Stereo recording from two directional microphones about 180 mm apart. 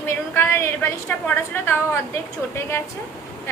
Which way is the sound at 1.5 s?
10° left (ahead or behind).